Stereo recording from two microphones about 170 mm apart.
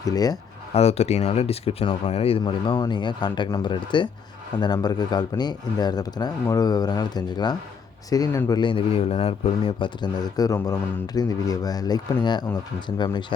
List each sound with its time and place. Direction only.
0.0 s speech: 20° left (ahead or behind)
0.7 s speech: 40° left (ahead or behind)